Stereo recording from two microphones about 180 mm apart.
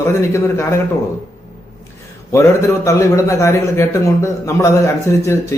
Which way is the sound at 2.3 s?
15° left (ahead or behind).